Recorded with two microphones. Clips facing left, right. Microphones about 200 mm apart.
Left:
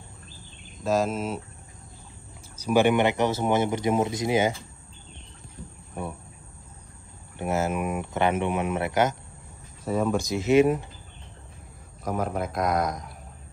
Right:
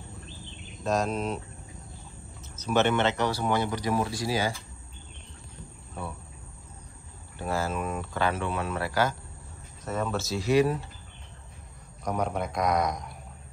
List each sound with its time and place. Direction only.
0.8 s a man's voice: centre (ahead or behind)
2.6 s speech: 10° left (ahead or behind)
7.3 s speech: 20° left (ahead or behind)
9.8 s speech: 10° left (ahead or behind)
12.0 s a man's voice: 5° left (ahead or behind)